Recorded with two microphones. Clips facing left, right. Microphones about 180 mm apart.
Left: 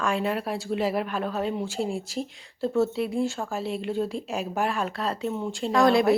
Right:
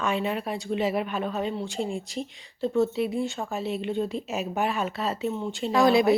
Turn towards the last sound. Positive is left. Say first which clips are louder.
# even
turn(degrees=0)  # may be behind; listen again after turning